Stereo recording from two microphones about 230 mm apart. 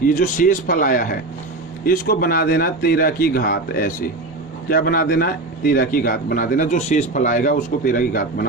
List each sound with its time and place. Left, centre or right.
0.2 s a man's voice: left